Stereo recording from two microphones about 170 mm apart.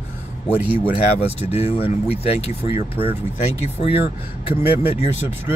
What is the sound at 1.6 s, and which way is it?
Speech, 10° right (ahead or behind).